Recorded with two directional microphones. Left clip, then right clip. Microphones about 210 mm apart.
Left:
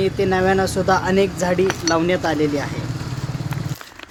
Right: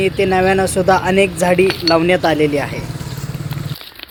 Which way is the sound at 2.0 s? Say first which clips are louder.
Right 6 dB; 15° right (ahead or behind).